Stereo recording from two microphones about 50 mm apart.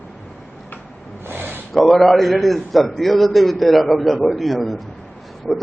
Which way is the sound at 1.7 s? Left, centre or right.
Centre.